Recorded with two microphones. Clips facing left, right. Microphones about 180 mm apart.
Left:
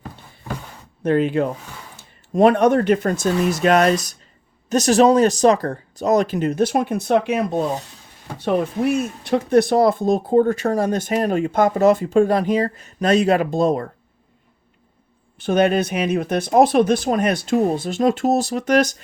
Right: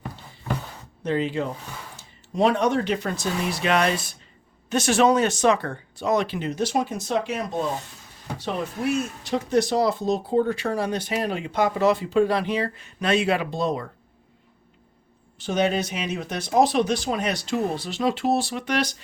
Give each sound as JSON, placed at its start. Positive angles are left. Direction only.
{"t": 1.0, "sound": "speech", "side_deg": 55}
{"t": 15.4, "sound": "speech", "side_deg": 55}